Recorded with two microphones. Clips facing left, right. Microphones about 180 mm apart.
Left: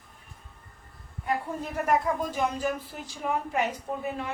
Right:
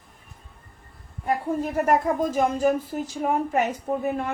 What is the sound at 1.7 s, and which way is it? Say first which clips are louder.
A woman's voice: right 3 dB; 45° right (ahead or behind).